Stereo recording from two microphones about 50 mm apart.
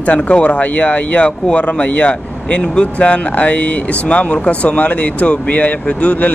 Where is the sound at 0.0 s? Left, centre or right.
Left.